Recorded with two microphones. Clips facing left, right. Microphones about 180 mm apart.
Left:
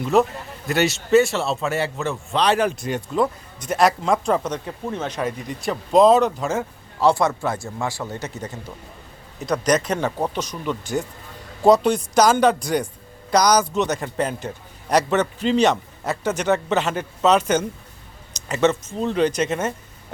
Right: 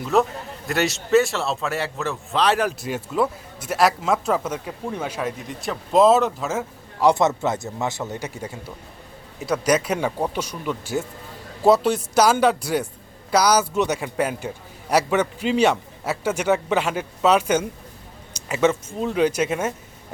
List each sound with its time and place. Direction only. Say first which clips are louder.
0.0 s a man's voice: left 2 dB; centre (ahead or behind)
7.0 s a man's voice: right 1 dB; 20° right (ahead or behind)